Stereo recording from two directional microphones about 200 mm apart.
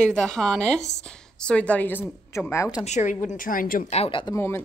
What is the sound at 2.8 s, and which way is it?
A woman's voice, 35° left (ahead or behind).